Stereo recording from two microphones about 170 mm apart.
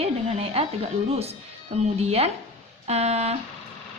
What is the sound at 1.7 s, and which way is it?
A woman's voice, 40° right (ahead or behind).